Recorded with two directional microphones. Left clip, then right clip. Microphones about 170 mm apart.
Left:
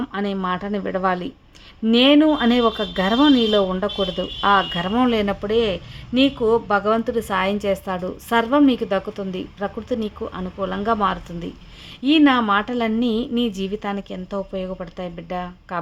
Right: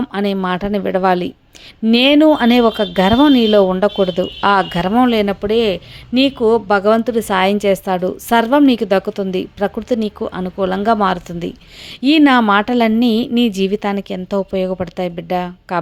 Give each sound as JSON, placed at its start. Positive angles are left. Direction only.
{"t": 0.0, "sound": "a woman's voice", "side_deg": -30}